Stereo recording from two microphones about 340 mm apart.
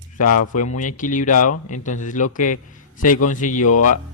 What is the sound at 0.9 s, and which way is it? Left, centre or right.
A man's voice, left.